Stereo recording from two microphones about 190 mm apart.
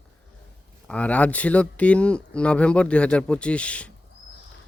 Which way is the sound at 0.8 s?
5° left (ahead or behind).